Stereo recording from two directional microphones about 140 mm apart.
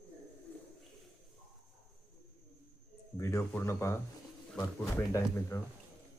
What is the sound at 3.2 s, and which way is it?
Speech, 20° left (ahead or behind).